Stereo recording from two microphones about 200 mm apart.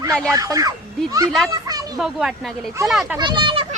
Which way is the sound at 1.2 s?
Centre (ahead or behind).